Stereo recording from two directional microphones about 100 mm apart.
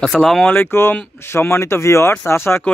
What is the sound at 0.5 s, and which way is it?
Speech, 20° left (ahead or behind).